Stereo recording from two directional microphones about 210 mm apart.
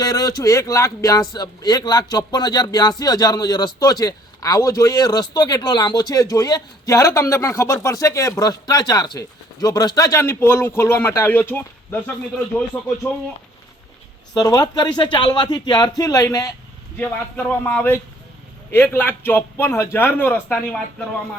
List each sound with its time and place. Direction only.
0.0 s a man's voice: 15° left (ahead or behind)
14.3 s a man's voice: 15° left (ahead or behind)